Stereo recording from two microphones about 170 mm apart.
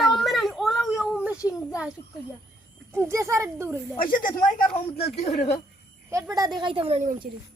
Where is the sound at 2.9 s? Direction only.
15° right (ahead or behind).